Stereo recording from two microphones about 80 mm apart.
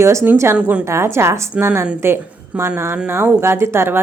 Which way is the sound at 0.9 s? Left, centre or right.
Right.